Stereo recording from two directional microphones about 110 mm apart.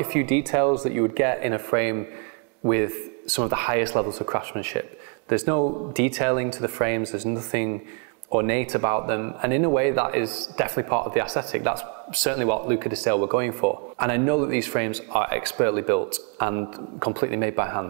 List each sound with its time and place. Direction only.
0.0 s speech: 20° right (ahead or behind)